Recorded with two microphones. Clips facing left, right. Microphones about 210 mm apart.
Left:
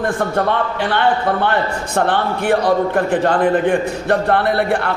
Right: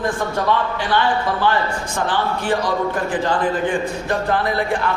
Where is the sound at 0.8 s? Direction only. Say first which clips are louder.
Left 3 dB; 60° left (ahead or behind).